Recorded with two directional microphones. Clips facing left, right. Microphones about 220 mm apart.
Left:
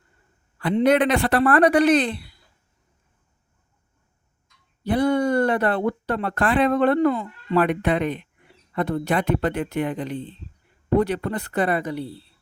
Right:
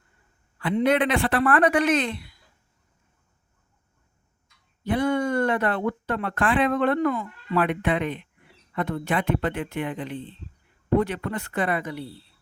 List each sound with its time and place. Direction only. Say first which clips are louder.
0.6 s speech: left 3 dB; 40° left (ahead or behind)
4.8 s speech: left 3 dB; 35° left (ahead or behind)